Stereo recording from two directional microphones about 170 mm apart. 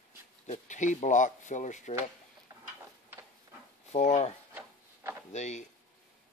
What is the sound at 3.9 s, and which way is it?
Speech, 40° left (ahead or behind).